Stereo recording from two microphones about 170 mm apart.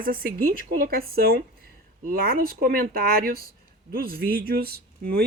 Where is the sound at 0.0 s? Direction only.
60° right (ahead or behind).